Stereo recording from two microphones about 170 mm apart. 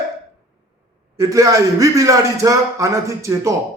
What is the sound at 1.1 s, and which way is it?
A man's voice, 20° right (ahead or behind).